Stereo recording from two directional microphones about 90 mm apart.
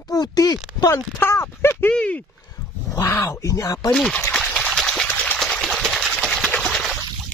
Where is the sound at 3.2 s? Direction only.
40° left (ahead or behind).